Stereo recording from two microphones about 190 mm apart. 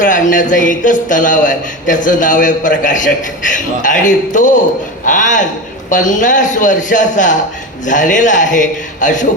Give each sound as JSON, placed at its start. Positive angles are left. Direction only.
{"t": 0.0, "sound": "a man's voice", "side_deg": 45}